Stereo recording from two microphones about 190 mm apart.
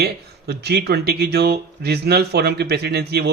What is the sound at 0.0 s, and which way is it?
Speech, 60° right (ahead or behind).